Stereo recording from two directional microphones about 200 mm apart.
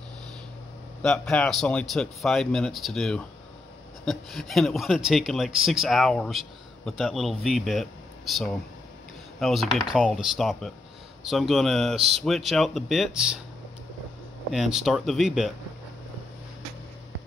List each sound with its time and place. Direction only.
1.0 s speech: 5° left (ahead or behind)
14.5 s speech: centre (ahead or behind)